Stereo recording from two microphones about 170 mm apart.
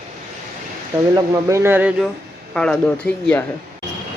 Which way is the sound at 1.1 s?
20° right (ahead or behind).